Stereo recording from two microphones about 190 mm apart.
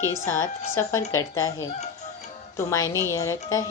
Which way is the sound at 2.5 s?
15° left (ahead or behind).